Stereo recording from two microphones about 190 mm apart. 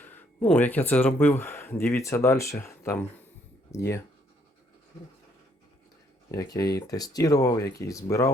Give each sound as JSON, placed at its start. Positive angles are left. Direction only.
{"t": 0.0, "sound": "speech", "side_deg": 10}
{"t": 6.3, "sound": "speech", "side_deg": 20}